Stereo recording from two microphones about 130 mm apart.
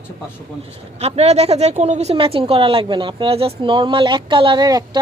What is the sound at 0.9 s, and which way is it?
A woman's voice, 55° right (ahead or behind).